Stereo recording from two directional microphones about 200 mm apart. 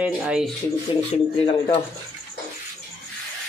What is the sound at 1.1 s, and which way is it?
Speech, 25° left (ahead or behind).